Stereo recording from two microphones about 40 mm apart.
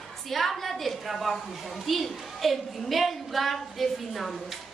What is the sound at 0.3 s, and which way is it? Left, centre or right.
A woman's voice, centre.